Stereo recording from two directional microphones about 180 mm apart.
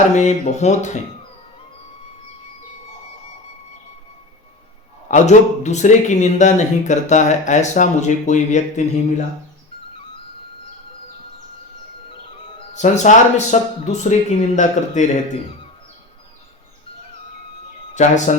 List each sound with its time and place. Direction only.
0.2 s speech: 40° left (ahead or behind)
5.0 s speech: 40° left (ahead or behind)
12.5 s speech: 40° left (ahead or behind)
17.9 s speech: 40° left (ahead or behind)